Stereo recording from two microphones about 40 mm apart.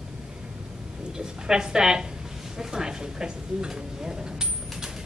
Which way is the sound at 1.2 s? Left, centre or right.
Centre.